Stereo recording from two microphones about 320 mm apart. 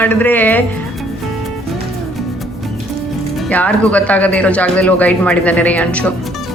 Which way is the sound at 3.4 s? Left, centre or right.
Centre.